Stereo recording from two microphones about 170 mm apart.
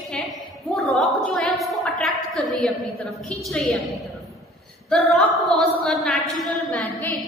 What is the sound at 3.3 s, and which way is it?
A woman's voice, centre (ahead or behind).